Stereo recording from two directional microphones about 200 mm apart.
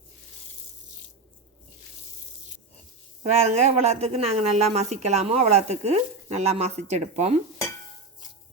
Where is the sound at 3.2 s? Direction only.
35° right (ahead or behind).